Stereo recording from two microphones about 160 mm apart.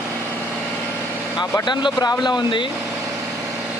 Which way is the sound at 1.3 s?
25° left (ahead or behind).